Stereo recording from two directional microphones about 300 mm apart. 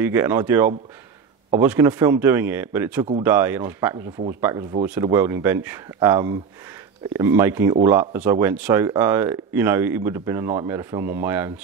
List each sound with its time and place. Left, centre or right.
0.0 s speech: centre